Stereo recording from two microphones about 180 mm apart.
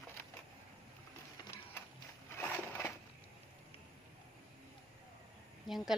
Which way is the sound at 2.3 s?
15° left (ahead or behind).